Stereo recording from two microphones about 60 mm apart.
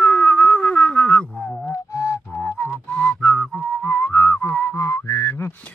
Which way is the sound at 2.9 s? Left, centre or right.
Centre.